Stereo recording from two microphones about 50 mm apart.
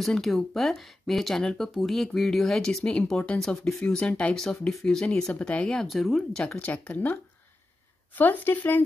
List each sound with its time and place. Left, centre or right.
0.0 s speech: centre
1.7 s speech: centre
2.8 s speech: left
4.4 s speech: centre
5.9 s speech: centre
6.4 s speech: left